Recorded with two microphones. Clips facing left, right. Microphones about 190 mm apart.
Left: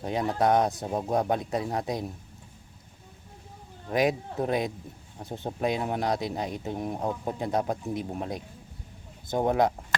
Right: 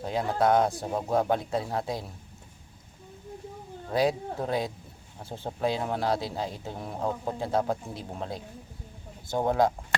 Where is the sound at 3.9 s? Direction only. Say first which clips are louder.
Even; 15° left (ahead or behind).